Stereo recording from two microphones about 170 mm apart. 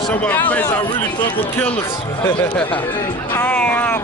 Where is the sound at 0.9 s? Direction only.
25° left (ahead or behind).